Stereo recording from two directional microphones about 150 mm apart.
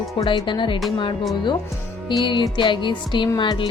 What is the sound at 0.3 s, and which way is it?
Speech, 35° left (ahead or behind).